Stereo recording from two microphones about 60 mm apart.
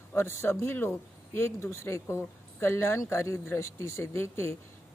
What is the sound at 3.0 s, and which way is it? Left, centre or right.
Speech, left.